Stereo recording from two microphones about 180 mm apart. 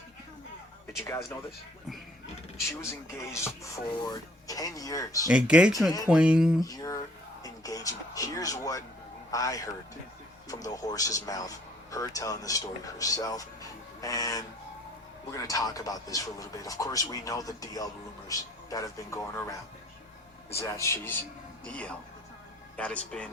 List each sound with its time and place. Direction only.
0.9 s speech: 15° left (ahead or behind)
3.2 s speech: 15° left (ahead or behind)
5.3 s speech: 5° right (ahead or behind)
6.6 s speech: 20° left (ahead or behind)